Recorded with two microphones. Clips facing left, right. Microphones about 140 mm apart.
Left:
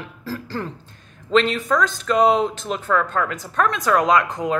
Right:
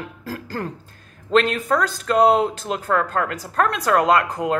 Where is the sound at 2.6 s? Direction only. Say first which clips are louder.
Even; 35° right (ahead or behind).